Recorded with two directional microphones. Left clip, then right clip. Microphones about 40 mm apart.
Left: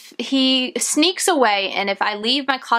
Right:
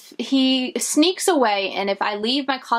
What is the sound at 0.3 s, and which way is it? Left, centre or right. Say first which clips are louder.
A woman's voice: left 2 dB; left.